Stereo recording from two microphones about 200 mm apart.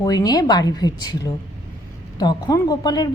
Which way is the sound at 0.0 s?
20° left (ahead or behind).